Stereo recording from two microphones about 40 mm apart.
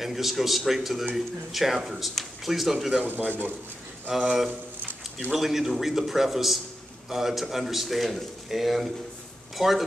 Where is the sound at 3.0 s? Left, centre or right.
Right.